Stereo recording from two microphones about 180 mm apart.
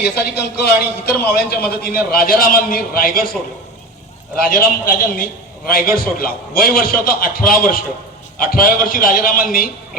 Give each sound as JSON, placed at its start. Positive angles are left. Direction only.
{"t": 0.0, "sound": "a man's voice", "side_deg": 65}
{"t": 4.4, "sound": "a man's voice", "side_deg": 50}